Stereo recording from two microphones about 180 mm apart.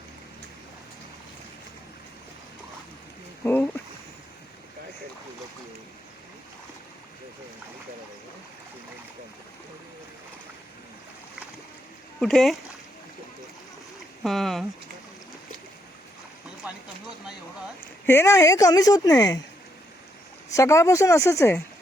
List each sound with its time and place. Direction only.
3.4 s speech: 10° left (ahead or behind)
12.2 s speech: centre (ahead or behind)
14.3 s speech: centre (ahead or behind)
18.0 s speech: 15° left (ahead or behind)
20.5 s speech: 15° left (ahead or behind)